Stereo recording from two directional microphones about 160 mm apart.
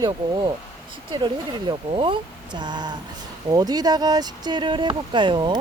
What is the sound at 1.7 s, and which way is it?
Speech, 30° right (ahead or behind).